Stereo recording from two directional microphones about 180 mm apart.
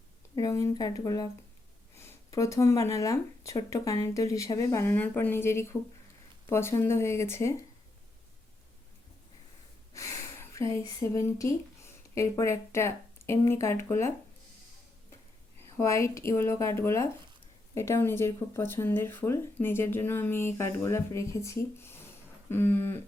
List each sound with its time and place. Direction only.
0.3 s speech: 20° left (ahead or behind)
9.9 s speech: 15° left (ahead or behind)
15.8 s speech: 15° left (ahead or behind)